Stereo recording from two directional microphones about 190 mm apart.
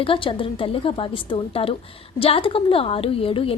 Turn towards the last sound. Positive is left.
turn(degrees=30)  # may be behind; listen again after turning